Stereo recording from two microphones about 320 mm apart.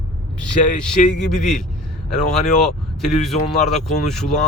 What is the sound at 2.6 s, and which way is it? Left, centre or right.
Speech, centre.